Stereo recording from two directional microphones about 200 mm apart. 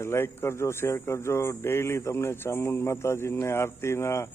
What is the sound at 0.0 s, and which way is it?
Speech, 15° left (ahead or behind).